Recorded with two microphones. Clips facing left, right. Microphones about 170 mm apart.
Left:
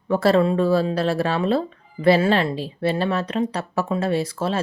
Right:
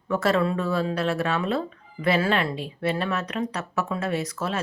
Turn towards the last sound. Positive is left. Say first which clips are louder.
# left 5 dB
turn(degrees=30)  # may be behind; listen again after turning